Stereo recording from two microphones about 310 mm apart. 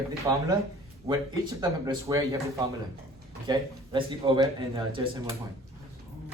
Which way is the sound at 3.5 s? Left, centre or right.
Centre.